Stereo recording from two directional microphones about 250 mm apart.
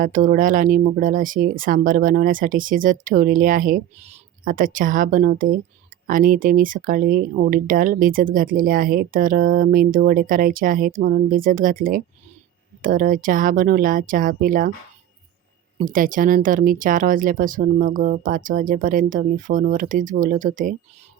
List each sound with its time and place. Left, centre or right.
0.0 s speech: right
15.8 s speech: right